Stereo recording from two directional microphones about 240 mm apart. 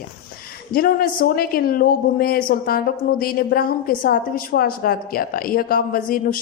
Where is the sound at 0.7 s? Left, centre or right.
Left.